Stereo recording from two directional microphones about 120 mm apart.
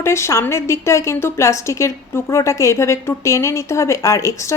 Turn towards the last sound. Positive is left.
turn(degrees=25)  # may be behind; listen again after turning